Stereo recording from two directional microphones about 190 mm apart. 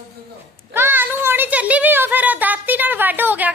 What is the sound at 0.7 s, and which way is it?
A woman's voice, 10° right (ahead or behind).